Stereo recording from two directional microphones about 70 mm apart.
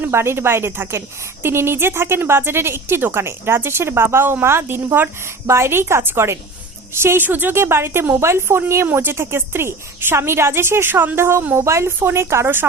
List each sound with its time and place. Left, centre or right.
0.1 s a woman's voice: right
7.3 s a woman's voice: right